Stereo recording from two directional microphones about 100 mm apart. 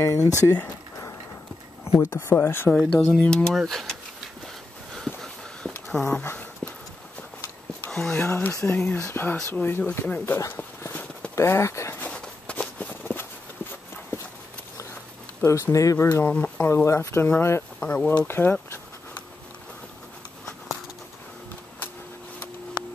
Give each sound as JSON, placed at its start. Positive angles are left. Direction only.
{"t": 0.0, "sound": "speech", "side_deg": 30}
{"t": 2.0, "sound": "speech", "side_deg": 25}
{"t": 2.7, "sound": "speech", "side_deg": 5}
{"t": 4.9, "sound": "a sound", "side_deg": 0}
{"t": 7.9, "sound": "speech", "side_deg": 5}
{"t": 8.2, "sound": "speech", "side_deg": 20}
{"t": 10.5, "sound": "clip-clop", "side_deg": 15}
{"t": 11.3, "sound": "speech", "side_deg": 30}
{"t": 12.0, "sound": "a sound", "side_deg": 10}
{"t": 15.4, "sound": "speech", "side_deg": 30}
{"t": 16.3, "sound": "speech", "side_deg": 15}
{"t": 17.7, "sound": "a sound", "side_deg": 15}